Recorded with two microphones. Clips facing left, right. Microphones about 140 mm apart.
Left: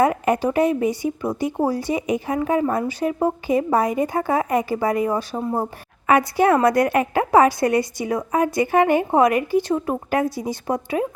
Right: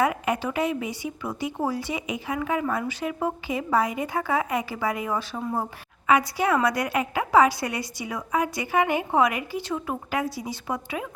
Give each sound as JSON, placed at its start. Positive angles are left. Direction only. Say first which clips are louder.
{"t": 0.0, "sound": "speech", "louder": "left 6 dB", "side_deg": 45}
{"t": 5.4, "sound": "speech", "louder": "left 5 dB", "side_deg": 25}
{"t": 6.1, "sound": "speech", "louder": "left 5 dB", "side_deg": 55}